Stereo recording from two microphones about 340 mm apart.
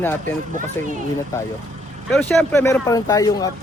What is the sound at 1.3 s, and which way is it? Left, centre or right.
Speech, centre.